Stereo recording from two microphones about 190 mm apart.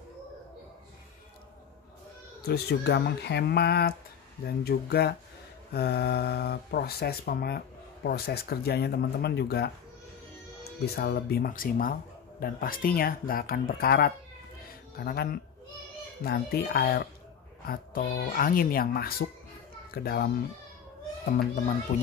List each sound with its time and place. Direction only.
2.4 s speech: 60° left (ahead or behind)
11.0 s speech: 60° left (ahead or behind)
21.3 s speech: 45° left (ahead or behind)